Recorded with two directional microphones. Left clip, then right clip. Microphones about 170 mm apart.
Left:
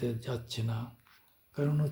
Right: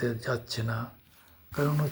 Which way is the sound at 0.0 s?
10° left (ahead or behind).